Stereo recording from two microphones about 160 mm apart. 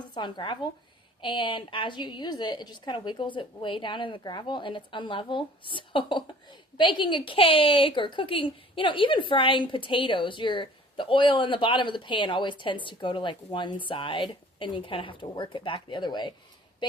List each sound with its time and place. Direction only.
0.1 s a woman's voice: 30° left (ahead or behind)